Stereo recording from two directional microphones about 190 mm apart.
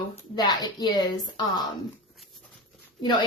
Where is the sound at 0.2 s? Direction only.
20° left (ahead or behind).